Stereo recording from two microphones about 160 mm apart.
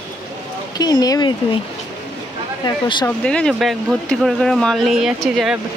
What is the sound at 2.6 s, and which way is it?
Speech, 30° left (ahead or behind).